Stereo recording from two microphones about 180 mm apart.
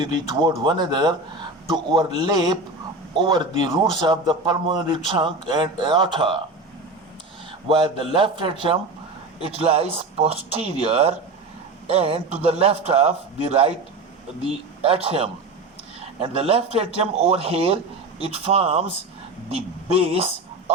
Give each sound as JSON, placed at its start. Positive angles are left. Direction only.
{"t": 0.0, "sound": "a man's voice", "side_deg": -25}
{"t": 7.7, "sound": "a man's voice", "side_deg": -30}